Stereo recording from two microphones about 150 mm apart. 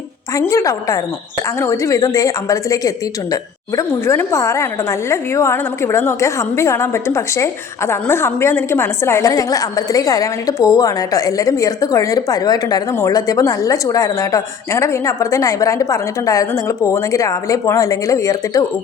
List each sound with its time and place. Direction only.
0.3 s a woman's voice: 20° left (ahead or behind)